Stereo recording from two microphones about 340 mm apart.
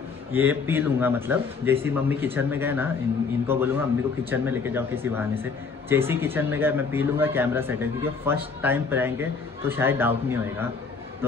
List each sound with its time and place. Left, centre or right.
0.3 s speech: centre